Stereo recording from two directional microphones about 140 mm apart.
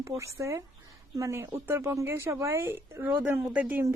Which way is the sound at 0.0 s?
20° right (ahead or behind).